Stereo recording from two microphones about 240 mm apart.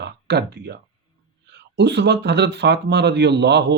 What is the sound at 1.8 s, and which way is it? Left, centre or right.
A man's voice, right.